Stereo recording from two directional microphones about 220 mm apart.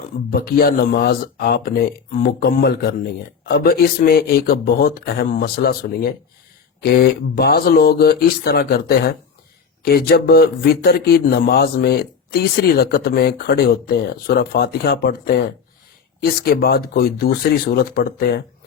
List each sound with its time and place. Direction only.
0.3 s a man's voice: 40° left (ahead or behind)